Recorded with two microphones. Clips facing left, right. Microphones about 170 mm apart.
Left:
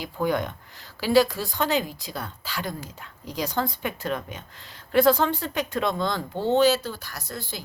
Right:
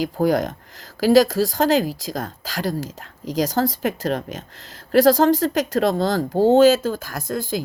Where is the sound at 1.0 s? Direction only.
40° right (ahead or behind).